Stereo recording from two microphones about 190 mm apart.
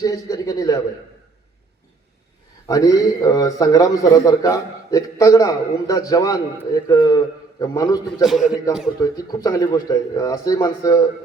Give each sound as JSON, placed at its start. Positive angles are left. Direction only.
{"t": 0.0, "sound": "a man's voice", "side_deg": 20}
{"t": 2.6, "sound": "a man's voice", "side_deg": 20}
{"t": 8.2, "sound": "a man's voice", "side_deg": 0}
{"t": 9.0, "sound": "a man's voice", "side_deg": 20}